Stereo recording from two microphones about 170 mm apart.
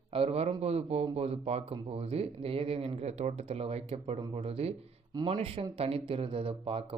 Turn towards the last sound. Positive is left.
turn(degrees=-35)  # may be behind; listen again after turning